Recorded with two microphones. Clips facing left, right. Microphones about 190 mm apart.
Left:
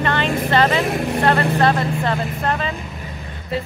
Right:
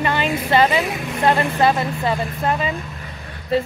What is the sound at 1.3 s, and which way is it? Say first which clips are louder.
A woman's voice: right 1 dB; 10° right (ahead or behind).